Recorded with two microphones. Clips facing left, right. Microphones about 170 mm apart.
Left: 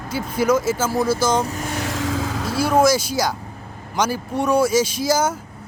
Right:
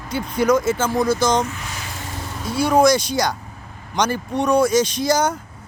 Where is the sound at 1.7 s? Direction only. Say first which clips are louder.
Left 9 dB; 85° left.